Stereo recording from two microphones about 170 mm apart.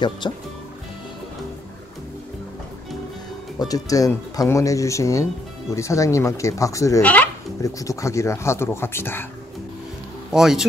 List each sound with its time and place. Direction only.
0.2 s speech: 25° left (ahead or behind)
3.5 s speech: 20° left (ahead or behind)
10.3 s speech: centre (ahead or behind)